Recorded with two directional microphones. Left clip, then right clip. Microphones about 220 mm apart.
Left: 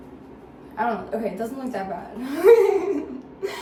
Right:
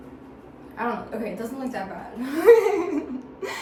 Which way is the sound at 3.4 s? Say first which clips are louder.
Left 2 dB; 20° right (ahead or behind).